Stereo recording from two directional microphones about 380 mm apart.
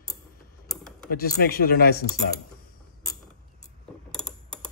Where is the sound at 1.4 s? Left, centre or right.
Left.